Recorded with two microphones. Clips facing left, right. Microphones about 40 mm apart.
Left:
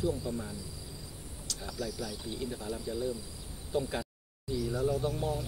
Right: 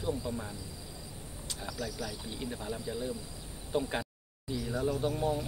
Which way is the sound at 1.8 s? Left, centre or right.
Centre.